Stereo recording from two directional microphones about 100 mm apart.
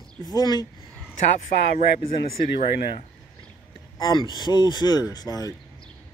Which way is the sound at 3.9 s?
50° left (ahead or behind).